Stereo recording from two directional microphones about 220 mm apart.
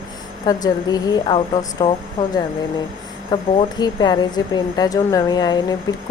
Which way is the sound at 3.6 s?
20° left (ahead or behind).